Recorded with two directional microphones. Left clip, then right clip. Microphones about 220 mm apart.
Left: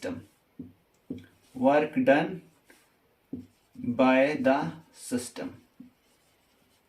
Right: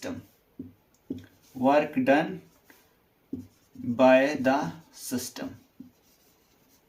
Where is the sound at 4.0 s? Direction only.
15° left (ahead or behind).